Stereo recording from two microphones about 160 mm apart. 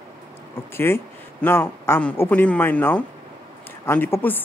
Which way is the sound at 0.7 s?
15° left (ahead or behind).